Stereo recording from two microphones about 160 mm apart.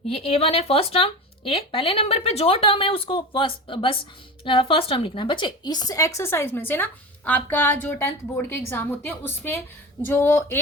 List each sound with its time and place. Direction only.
0.1 s a woman's voice: 35° left (ahead or behind); by 10.6 s 15° left (ahead or behind)